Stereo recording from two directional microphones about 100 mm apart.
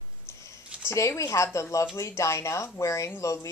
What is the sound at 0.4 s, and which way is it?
A woman's voice, 30° left (ahead or behind).